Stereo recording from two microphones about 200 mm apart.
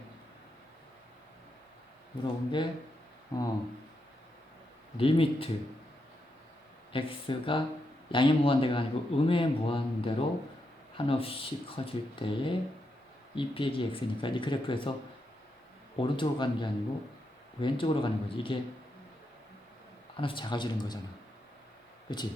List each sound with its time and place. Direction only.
2.2 s speech: 25° left (ahead or behind)
4.9 s speech: 25° left (ahead or behind)
6.9 s speech: 25° left (ahead or behind)
16.0 s speech: 25° left (ahead or behind)
20.1 s speech: 25° left (ahead or behind)
22.1 s speech: 20° left (ahead or behind)